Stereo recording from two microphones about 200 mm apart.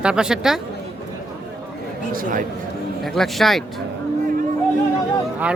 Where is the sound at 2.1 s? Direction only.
45° right (ahead or behind).